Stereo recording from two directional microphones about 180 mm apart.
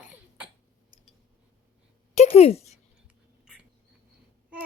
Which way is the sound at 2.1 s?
35° left (ahead or behind).